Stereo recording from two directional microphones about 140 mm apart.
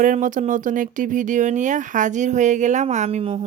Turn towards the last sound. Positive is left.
turn(degrees=-45)  # may be behind; listen again after turning